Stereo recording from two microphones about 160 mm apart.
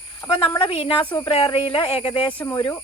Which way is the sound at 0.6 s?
35° left (ahead or behind).